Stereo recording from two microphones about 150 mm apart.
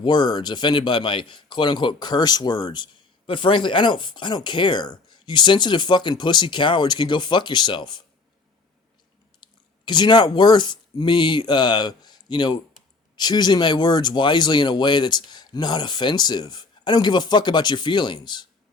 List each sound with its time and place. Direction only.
0.0 s a man's voice: 30° left (ahead or behind)
9.4 s speech: 30° left (ahead or behind)